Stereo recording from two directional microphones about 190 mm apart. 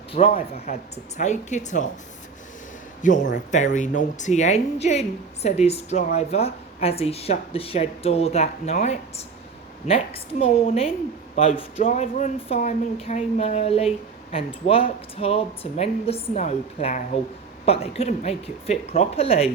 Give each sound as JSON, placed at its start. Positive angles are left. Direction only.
{"t": 0.1, "sound": "a woman's voice", "side_deg": 30}
{"t": 3.0, "sound": "a man's voice", "side_deg": 45}